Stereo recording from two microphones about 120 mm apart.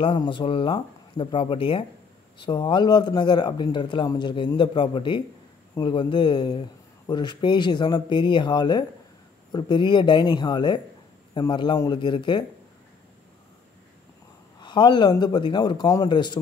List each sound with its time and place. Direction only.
0.0 s a man's voice: 45° left (ahead or behind)
14.6 s a man's voice: 40° left (ahead or behind)